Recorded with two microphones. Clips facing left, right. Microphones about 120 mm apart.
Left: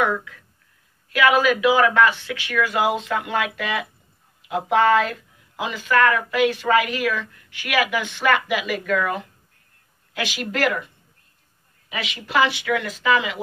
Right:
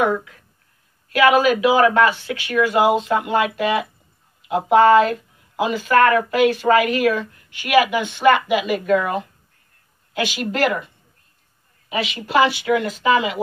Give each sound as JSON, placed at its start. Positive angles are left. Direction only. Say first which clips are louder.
{"t": 1.1, "sound": "speech", "louder": "right 3 dB", "side_deg": -40}
{"t": 7.7, "sound": "speech", "louder": "right 6 dB", "side_deg": -30}
{"t": 11.9, "sound": "speech", "louder": "right 4 dB", "side_deg": -35}